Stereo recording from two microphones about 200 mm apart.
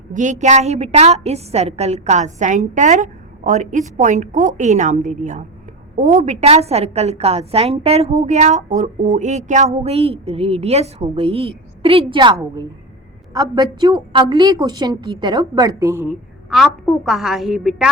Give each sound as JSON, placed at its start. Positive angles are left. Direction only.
{"t": 0.1, "sound": "a woman's voice", "side_deg": -40}
{"t": 16.5, "sound": "a woman's voice", "side_deg": 0}